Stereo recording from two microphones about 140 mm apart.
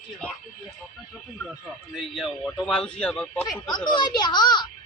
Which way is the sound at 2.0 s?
Centre (ahead or behind).